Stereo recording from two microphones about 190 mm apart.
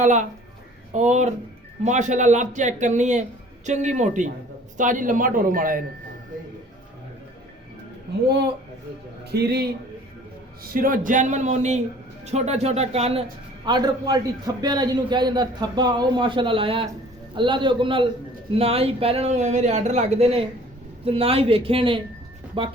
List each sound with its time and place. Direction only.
0.0 s a man's voice: 40° right (ahead or behind)
9.3 s a man's voice: 60° right (ahead or behind)
10.6 s a man's voice: 45° right (ahead or behind)
13.7 s a man's voice: 20° right (ahead or behind)